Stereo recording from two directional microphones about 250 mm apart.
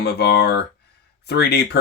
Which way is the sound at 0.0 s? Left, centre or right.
Left.